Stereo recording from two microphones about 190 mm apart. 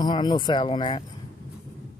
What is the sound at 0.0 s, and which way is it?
Speech, 25° left (ahead or behind).